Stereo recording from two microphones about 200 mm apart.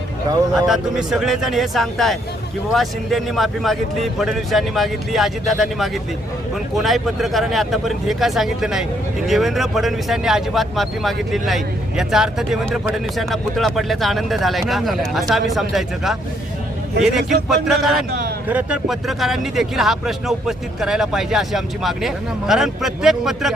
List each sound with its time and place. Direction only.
0.7 s speech: centre (ahead or behind)
18.1 s a sound: 50° right (ahead or behind)
18.4 s speech: 5° right (ahead or behind)